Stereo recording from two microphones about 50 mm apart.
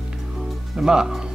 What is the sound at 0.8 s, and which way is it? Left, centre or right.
Speech, centre.